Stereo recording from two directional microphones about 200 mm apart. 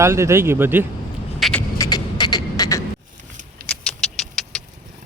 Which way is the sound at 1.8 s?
20° left (ahead or behind).